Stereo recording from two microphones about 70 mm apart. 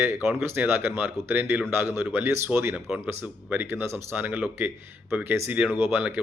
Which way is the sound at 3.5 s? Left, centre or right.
Right.